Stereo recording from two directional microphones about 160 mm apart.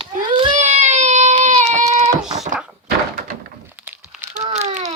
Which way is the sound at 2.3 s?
45° right (ahead or behind).